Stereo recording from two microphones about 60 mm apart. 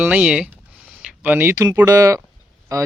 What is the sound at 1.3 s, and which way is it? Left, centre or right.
Speech, right.